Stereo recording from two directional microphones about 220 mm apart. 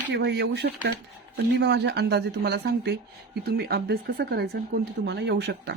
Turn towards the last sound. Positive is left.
turn(degrees=-50)  # may be behind; listen again after turning